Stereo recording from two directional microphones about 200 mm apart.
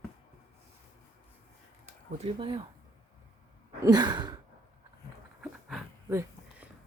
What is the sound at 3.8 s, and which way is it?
Sigh, 20° right (ahead or behind).